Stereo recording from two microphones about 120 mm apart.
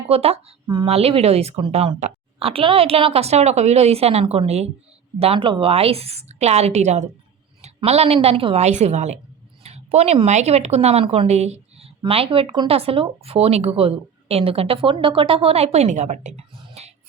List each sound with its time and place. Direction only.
0.1 s a woman's voice: 55° right (ahead or behind)
5.2 s a woman's voice: 50° right (ahead or behind); by 7.1 s 70° right (ahead or behind)
7.9 s a woman's voice: 60° right (ahead or behind)
11.3 s speech: 65° right (ahead or behind); by 12.6 s 45° right (ahead or behind)
12.6 s a woman's voice: 55° right (ahead or behind); by 16.3 s 75° right (ahead or behind)
16.5 s whispering: 45° right (ahead or behind)